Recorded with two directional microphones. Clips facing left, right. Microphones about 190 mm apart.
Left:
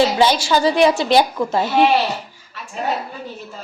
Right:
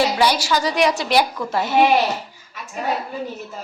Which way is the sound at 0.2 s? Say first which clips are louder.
Left 3 dB; 25° left (ahead or behind).